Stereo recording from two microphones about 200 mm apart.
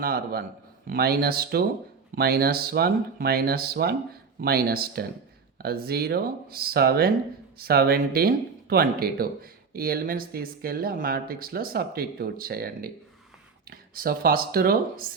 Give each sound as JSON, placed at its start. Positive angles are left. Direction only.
{"t": 0.0, "sound": "speech", "side_deg": -50}